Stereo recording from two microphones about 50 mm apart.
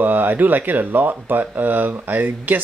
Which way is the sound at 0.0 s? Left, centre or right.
Right.